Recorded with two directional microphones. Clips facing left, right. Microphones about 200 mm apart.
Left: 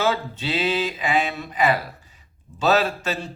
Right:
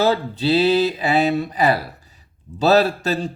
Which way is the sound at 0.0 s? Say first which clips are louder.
Right 5 dB; 35° right (ahead or behind).